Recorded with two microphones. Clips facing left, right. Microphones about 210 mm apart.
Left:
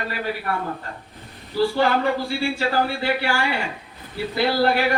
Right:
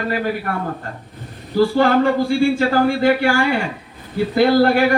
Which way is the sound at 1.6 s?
45° right (ahead or behind).